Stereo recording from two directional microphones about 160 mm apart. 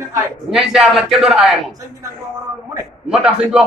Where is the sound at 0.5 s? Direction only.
Centre (ahead or behind).